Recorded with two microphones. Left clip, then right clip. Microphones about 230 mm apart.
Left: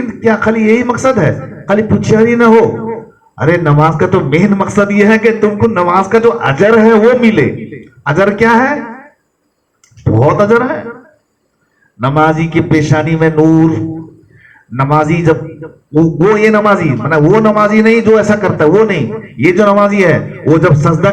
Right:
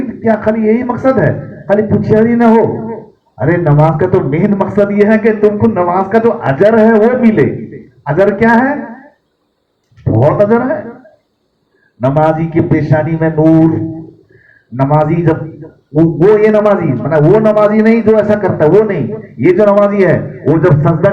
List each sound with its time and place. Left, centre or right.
0.1 s a man's voice: left
10.0 s speech: left
11.9 s a man's voice: left
14.8 s a man's voice: left